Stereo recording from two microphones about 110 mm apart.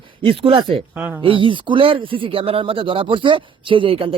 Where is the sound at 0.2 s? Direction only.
55° right (ahead or behind).